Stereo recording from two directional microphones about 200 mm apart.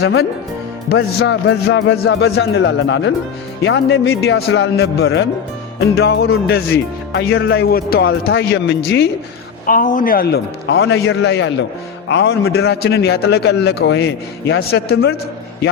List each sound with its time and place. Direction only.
0.9 s a man's voice: 80° left; by 6.3 s 55° left (ahead or behind)
7.1 s a man's voice: 70° left (ahead or behind)
7.4 s speech: 50° left (ahead or behind)
8.3 s a man's voice: 60° left (ahead or behind)
9.6 s a man's voice: 45° left (ahead or behind)